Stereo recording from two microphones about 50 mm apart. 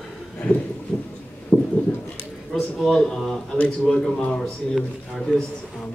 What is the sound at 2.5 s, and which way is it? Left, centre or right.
Speech, centre.